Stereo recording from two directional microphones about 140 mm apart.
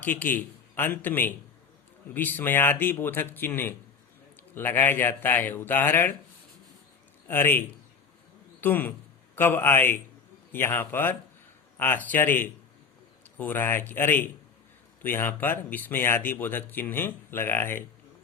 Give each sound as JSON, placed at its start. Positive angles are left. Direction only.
{"t": 0.0, "sound": "speech", "side_deg": 15}
{"t": 7.3, "sound": "speech", "side_deg": 15}
{"t": 8.6, "sound": "speech", "side_deg": 15}